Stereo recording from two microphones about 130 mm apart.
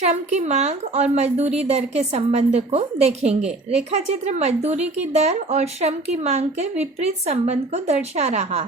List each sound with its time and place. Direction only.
0.0 s speech: 60° right (ahead or behind)